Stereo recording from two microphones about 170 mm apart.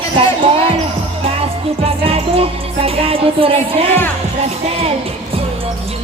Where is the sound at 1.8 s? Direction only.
35° right (ahead or behind).